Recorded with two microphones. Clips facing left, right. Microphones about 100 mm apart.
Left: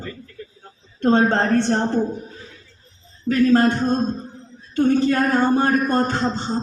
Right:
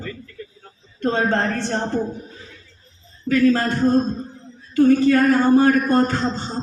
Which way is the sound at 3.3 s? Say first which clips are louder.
Left 1 dB; 25° left (ahead or behind).